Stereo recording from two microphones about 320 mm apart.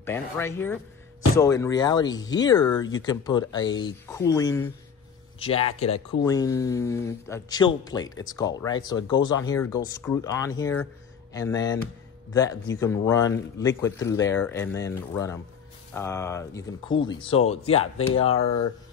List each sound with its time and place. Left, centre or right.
0.0 s speech: centre